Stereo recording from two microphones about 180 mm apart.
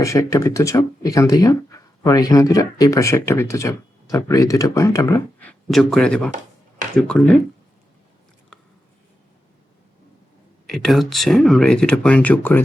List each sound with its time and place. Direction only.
0.0 s speech: 15° left (ahead or behind)
5.5 s speech: 5° left (ahead or behind)
10.7 s speech: centre (ahead or behind)